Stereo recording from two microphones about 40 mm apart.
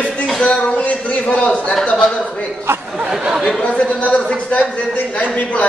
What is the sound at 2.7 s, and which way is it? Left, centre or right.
Chatter, right.